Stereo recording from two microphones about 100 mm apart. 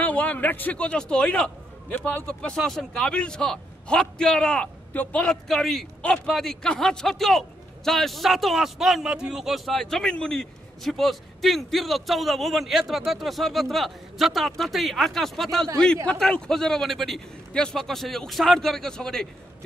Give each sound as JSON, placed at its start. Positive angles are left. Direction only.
{"t": 0.0, "sound": "a man's voice", "side_deg": 15}
{"t": 2.5, "sound": "a man's voice", "side_deg": 0}